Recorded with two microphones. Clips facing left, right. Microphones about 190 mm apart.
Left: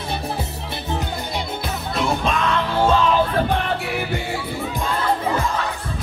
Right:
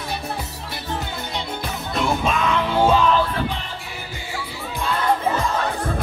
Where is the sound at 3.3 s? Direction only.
60° left (ahead or behind).